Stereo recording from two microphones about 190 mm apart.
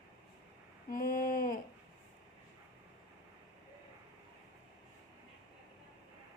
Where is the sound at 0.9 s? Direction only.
45° left (ahead or behind).